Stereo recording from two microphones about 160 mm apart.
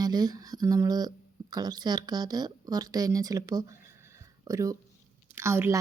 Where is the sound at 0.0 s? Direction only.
25° right (ahead or behind).